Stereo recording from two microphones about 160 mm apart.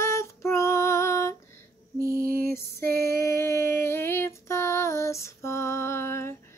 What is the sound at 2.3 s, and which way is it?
Lullaby, 65° right (ahead or behind).